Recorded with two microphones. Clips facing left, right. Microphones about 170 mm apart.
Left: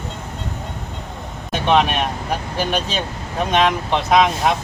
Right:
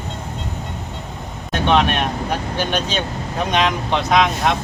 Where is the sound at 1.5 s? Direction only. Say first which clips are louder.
Even; centre (ahead or behind).